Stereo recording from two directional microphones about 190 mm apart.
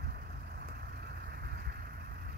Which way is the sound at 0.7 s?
55° right (ahead or behind).